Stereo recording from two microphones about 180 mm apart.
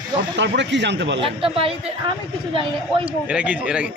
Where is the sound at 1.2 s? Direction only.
30° right (ahead or behind).